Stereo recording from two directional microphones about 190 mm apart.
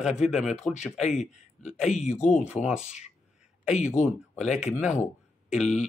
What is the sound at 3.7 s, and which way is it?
Speech, 40° left (ahead or behind).